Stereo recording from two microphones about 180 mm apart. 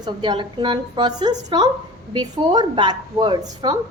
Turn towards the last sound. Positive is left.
turn(degrees=-25)  # may be behind; listen again after turning